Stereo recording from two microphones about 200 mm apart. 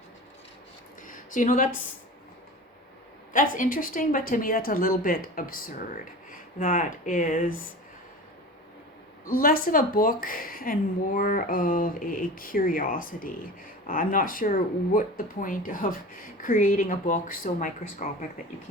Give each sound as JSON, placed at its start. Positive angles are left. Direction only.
{"t": 1.0, "sound": "a sound", "side_deg": 40}
{"t": 3.3, "sound": "speech", "side_deg": 40}
{"t": 9.2, "sound": "speech", "side_deg": 45}